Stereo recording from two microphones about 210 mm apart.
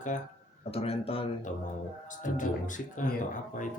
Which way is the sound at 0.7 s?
30° left (ahead or behind).